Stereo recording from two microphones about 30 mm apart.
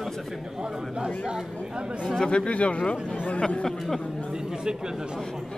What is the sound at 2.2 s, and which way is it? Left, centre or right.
Speech, left.